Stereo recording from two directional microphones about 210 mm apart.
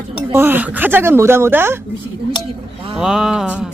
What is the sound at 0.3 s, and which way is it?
Speech, 10° right (ahead or behind).